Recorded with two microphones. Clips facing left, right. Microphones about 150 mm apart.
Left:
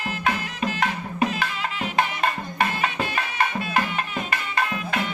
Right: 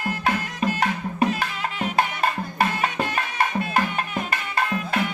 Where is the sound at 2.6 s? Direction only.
45° right (ahead or behind).